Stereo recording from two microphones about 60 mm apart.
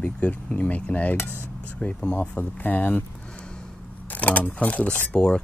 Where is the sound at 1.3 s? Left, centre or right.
Right.